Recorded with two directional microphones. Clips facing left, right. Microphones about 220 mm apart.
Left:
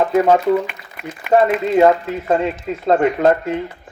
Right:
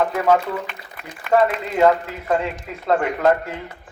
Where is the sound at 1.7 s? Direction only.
25° left (ahead or behind).